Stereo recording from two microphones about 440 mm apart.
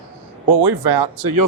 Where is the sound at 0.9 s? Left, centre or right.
Right.